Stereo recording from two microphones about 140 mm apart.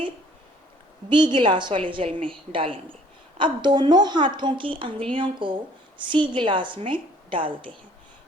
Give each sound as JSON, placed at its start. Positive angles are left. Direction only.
{"t": 1.1, "sound": "a woman's voice", "side_deg": -35}